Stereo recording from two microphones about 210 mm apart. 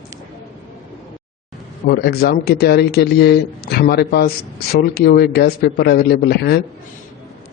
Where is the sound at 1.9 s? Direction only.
50° left (ahead or behind).